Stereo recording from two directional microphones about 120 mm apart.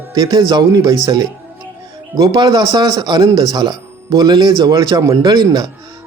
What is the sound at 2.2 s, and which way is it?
Speech, 35° right (ahead or behind).